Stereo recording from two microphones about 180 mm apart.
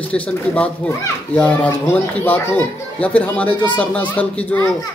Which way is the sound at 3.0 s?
10° left (ahead or behind).